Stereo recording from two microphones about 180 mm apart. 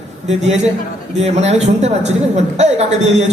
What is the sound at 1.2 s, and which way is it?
Speech, 35° right (ahead or behind).